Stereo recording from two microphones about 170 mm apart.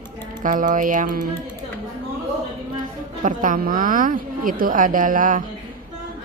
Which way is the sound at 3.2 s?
50° right (ahead or behind).